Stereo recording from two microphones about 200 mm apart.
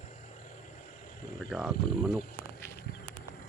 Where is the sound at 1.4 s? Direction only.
Centre (ahead or behind).